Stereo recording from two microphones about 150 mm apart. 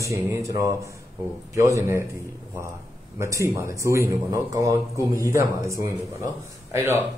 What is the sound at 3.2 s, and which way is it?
A man's voice, 20° right (ahead or behind).